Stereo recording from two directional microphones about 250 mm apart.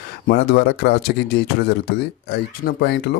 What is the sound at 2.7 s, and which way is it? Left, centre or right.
Speech, left.